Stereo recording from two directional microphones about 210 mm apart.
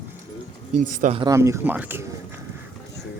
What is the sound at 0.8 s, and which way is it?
Speech, 35° right (ahead or behind).